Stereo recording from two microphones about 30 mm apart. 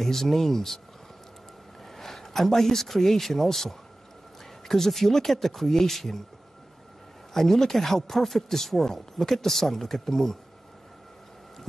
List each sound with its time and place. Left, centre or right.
0.0 s speech: centre
2.0 s speech: centre
7.3 s speech: centre